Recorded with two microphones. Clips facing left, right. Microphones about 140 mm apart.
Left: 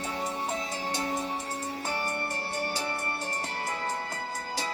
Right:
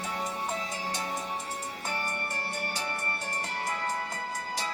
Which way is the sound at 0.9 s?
30° left (ahead or behind).